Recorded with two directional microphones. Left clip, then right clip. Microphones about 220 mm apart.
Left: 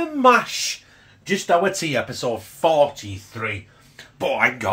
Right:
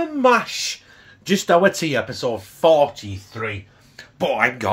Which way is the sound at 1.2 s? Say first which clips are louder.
Right 3 dB; 40° right (ahead or behind).